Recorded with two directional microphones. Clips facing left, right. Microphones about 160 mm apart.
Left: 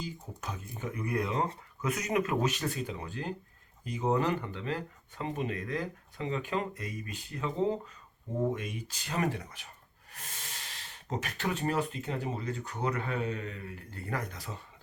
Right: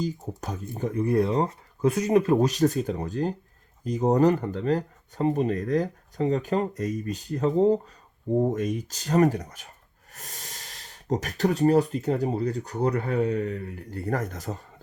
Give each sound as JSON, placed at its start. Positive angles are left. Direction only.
{"t": 0.0, "sound": "speech", "side_deg": -40}